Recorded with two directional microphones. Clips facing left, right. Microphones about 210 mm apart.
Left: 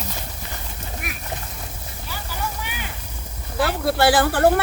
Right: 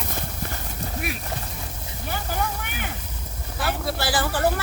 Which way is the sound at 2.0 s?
55° right (ahead or behind).